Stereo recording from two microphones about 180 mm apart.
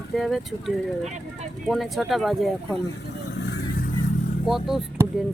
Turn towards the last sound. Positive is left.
turn(degrees=0)  # may be behind; listen again after turning